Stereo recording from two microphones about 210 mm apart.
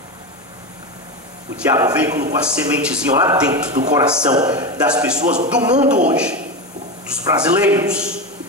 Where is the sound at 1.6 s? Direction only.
10° right (ahead or behind).